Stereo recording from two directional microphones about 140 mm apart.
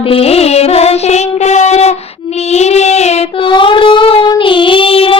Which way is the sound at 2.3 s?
50° left (ahead or behind).